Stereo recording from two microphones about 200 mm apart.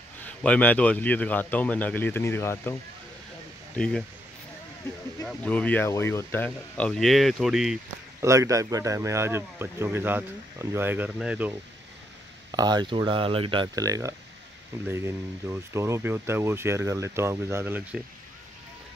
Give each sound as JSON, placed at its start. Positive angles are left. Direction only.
{"t": 0.2, "sound": "a man's voice", "side_deg": 5}
{"t": 3.7, "sound": "speech", "side_deg": 5}
{"t": 5.2, "sound": "speech", "side_deg": 5}
{"t": 8.2, "sound": "speech", "side_deg": -15}
{"t": 12.4, "sound": "speech", "side_deg": -20}